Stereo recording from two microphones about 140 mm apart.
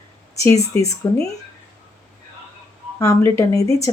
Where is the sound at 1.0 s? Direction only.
20° left (ahead or behind).